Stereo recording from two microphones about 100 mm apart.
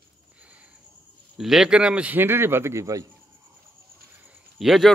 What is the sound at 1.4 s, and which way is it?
A man's voice, 5° right (ahead or behind).